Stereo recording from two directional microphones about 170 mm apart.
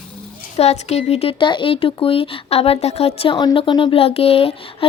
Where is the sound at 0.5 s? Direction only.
40° left (ahead or behind).